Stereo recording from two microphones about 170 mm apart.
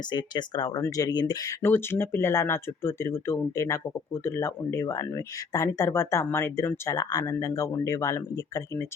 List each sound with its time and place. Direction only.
0.0 s speech: 25° left (ahead or behind)